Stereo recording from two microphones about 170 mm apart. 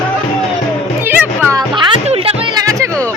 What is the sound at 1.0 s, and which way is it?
Music, 15° right (ahead or behind).